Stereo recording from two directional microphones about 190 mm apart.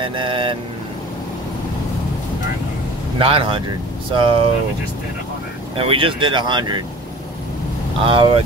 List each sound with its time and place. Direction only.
0.0 s speech: 25° right (ahead or behind)
3.2 s speech: 30° right (ahead or behind)
5.8 s speech: 30° right (ahead or behind)
8.0 s speech: 25° right (ahead or behind)